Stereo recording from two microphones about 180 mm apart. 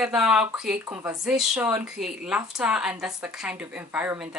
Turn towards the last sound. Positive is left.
turn(degrees=-10)  # may be behind; listen again after turning